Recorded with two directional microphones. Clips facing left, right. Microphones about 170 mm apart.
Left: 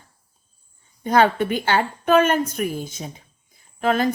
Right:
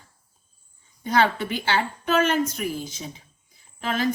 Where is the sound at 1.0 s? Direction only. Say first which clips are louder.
Left 4 dB; 50° left (ahead or behind).